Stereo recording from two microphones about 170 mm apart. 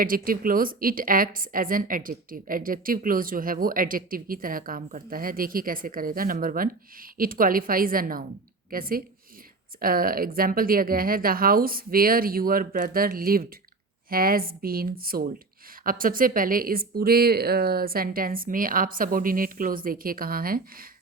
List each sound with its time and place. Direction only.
0.0 s a woman's voice: 55° right (ahead or behind)